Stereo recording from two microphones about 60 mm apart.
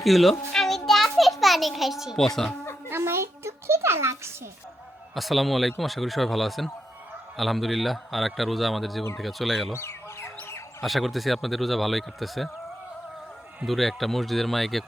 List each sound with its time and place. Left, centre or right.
0.0 s a sound: centre
2.1 s speech: centre
2.9 s a sound: right
5.1 s a man's voice: centre
9.7 s fowl: left
10.8 s a man's voice: centre
13.7 s a man's voice: centre